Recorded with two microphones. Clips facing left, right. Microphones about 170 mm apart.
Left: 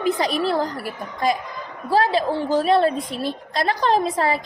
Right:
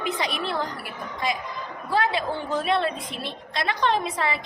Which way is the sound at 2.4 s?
Centre (ahead or behind).